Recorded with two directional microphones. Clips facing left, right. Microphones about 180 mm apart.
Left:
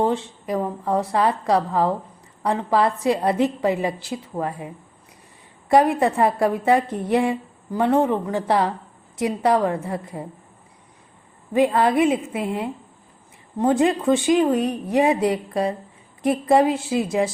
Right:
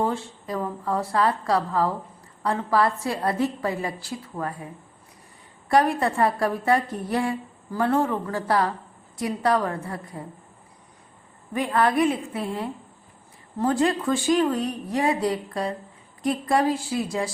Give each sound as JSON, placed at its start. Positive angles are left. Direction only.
{"t": 0.0, "sound": "a woman's voice", "side_deg": 20}
{"t": 11.5, "sound": "a woman's voice", "side_deg": 20}